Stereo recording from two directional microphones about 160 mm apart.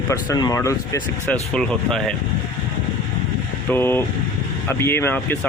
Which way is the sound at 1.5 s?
5° left (ahead or behind).